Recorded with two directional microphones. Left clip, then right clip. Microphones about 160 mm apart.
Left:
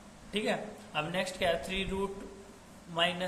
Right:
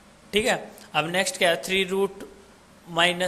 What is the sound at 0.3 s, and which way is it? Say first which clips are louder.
A man's voice: right 10 dB; 50° right (ahead or behind).